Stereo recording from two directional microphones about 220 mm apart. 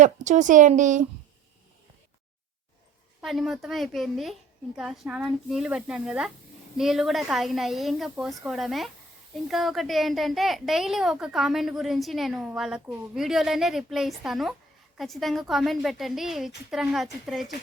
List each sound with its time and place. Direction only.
0.0 s a woman's voice: 35° right (ahead or behind)
3.2 s a woman's voice: centre (ahead or behind)